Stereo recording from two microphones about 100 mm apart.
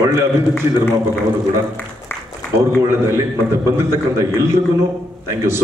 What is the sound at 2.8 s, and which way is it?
A man's voice, 30° right (ahead or behind).